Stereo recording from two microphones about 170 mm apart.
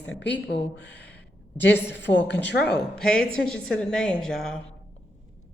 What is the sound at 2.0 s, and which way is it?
Speech, 90° left.